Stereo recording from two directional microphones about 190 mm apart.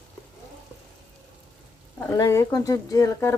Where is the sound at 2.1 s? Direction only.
15° left (ahead or behind).